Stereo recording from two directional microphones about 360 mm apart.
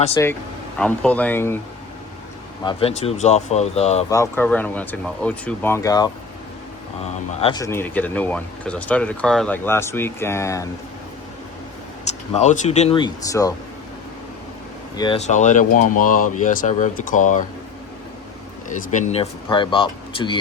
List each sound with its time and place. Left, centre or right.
0.2 s speech: centre
2.6 s speech: centre
7.4 s speech: centre
12.3 s speech: centre
14.9 s speech: centre
18.7 s speech: left